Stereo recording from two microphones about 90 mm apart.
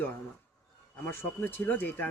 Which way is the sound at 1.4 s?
20° left (ahead or behind).